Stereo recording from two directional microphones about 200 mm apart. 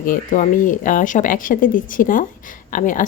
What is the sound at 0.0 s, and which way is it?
A woman's voice, 40° left (ahead or behind).